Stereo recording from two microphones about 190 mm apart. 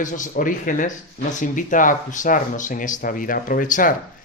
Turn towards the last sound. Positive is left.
turn(degrees=45)  # may be behind; listen again after turning